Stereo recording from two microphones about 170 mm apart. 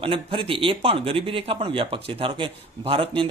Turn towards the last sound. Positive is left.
turn(degrees=-30)  # may be behind; listen again after turning